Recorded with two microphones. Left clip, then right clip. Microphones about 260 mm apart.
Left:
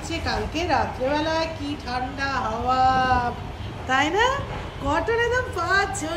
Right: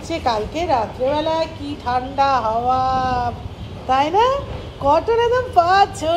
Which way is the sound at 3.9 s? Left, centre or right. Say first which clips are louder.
Right 5 dB; centre.